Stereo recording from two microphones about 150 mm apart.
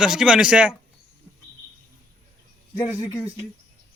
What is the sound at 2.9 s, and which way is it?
Speech, 25° left (ahead or behind).